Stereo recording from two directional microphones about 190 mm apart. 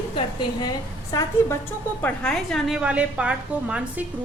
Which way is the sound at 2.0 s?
5° left (ahead or behind).